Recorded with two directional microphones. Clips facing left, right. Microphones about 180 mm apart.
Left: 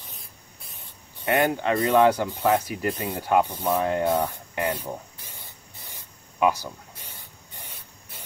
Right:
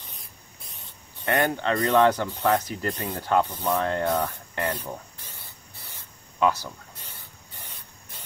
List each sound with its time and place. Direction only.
1.2 s speech: 15° left (ahead or behind)
6.4 s spray: 15° left (ahead or behind)